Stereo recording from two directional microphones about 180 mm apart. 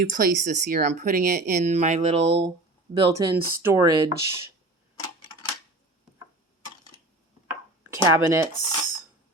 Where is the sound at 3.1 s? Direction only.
20° right (ahead or behind).